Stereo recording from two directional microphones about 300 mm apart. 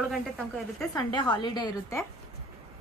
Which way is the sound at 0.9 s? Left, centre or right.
Centre.